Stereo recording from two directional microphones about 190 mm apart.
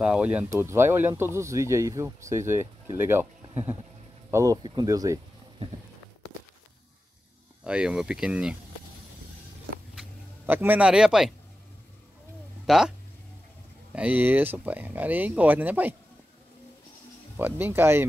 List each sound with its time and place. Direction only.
0.0 s speech: 5° right (ahead or behind)
7.6 s speech: 5° right (ahead or behind)
9.9 s a sound: 10° right (ahead or behind)
12.6 s speech: centre (ahead or behind)
13.9 s speech: 10° right (ahead or behind)
17.4 s speech: 10° right (ahead or behind)